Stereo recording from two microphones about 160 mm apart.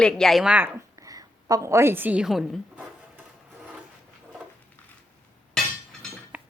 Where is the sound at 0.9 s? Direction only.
20° right (ahead or behind); by 2.6 s centre (ahead or behind).